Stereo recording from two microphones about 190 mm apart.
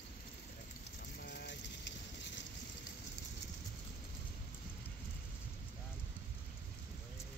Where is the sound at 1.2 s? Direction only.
60° left (ahead or behind).